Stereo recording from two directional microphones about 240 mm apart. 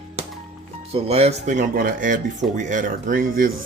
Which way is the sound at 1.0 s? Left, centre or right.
Right.